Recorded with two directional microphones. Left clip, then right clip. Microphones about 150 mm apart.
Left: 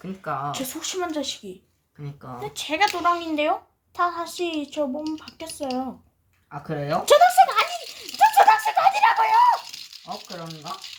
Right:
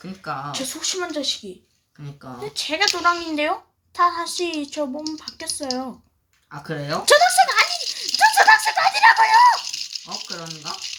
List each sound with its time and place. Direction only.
0.5 s a child's voice: 5° right (ahead or behind)
6.5 s speech: 25° left (ahead or behind)
6.9 s a sound: 5° right (ahead or behind)
8.2 s speech: 10° right (ahead or behind)
9.7 s speech: 15° left (ahead or behind)